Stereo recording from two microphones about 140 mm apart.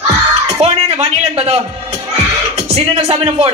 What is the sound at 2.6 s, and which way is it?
Speech, 45° right (ahead or behind).